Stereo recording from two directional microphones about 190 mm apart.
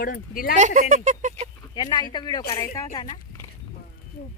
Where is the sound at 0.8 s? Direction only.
45° right (ahead or behind).